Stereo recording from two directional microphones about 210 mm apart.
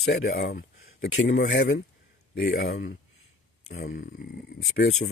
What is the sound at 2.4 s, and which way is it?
Speech, 35° left (ahead or behind).